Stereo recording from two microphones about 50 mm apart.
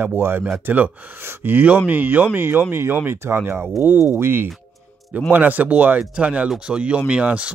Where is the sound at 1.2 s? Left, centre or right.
Right.